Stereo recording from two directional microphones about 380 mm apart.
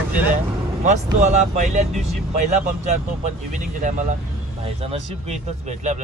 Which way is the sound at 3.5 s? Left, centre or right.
Centre.